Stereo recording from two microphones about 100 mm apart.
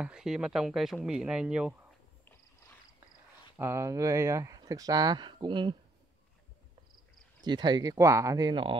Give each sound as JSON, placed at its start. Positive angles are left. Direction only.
{"t": 0.0, "sound": "speech", "side_deg": -5}
{"t": 3.5, "sound": "speech", "side_deg": -25}
{"t": 7.4, "sound": "speech", "side_deg": -45}
{"t": 8.5, "sound": "speech", "side_deg": -55}